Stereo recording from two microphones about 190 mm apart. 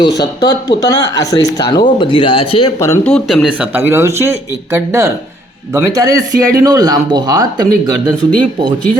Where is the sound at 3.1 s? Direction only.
Centre (ahead or behind); by 7.5 s 20° right (ahead or behind).